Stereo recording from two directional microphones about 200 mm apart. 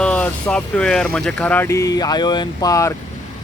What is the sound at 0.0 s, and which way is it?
Speech, 5° left (ahead or behind).